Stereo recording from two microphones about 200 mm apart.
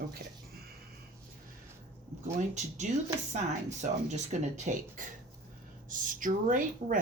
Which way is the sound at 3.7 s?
35° right (ahead or behind).